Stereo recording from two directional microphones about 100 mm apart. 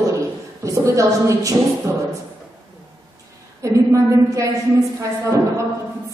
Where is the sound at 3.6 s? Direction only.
30° right (ahead or behind).